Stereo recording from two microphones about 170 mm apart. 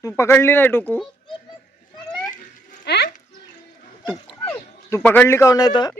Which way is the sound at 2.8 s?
80° left.